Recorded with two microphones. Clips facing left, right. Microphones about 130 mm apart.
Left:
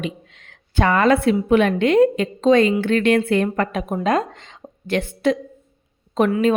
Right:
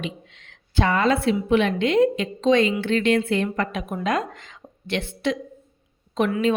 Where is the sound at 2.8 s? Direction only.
55° left (ahead or behind).